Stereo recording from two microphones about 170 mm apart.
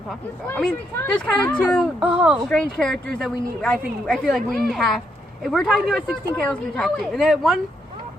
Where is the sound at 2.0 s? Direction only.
10° right (ahead or behind).